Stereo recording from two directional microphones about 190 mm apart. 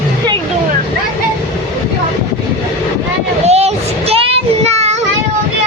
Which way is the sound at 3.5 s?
35° right (ahead or behind).